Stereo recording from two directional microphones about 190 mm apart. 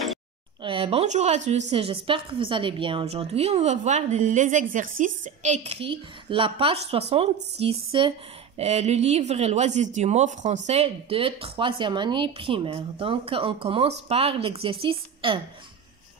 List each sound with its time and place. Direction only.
0.6 s a woman's voice: 30° right (ahead or behind)